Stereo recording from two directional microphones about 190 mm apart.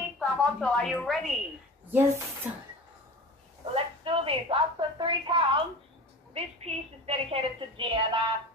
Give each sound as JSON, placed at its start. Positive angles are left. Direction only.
{"t": 0.2, "sound": "a woman's voice", "side_deg": 5}
{"t": 1.9, "sound": "speech", "side_deg": -10}
{"t": 3.7, "sound": "a woman's voice", "side_deg": -30}